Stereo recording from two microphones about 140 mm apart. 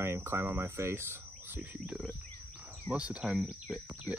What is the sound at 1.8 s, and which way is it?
Wild animals, 5° right (ahead or behind).